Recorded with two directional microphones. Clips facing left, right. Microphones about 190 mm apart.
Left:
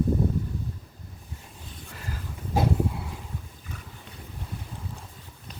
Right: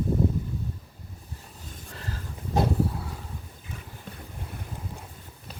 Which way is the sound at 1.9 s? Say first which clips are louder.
Even; 10° left (ahead or behind).